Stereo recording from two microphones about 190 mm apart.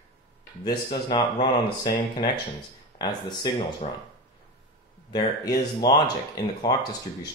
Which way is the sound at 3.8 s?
35° left (ahead or behind).